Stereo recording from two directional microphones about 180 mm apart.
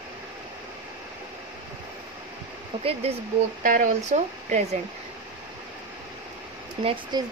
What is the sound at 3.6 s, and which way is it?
Speech, 45° right (ahead or behind).